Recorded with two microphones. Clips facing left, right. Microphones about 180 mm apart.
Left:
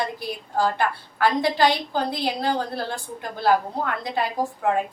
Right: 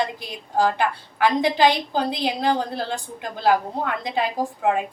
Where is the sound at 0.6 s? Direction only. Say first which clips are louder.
Right 2 dB; 15° right (ahead or behind).